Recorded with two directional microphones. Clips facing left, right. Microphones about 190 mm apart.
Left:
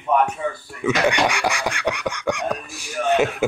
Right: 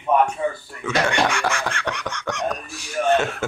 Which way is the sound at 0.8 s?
15° left (ahead or behind).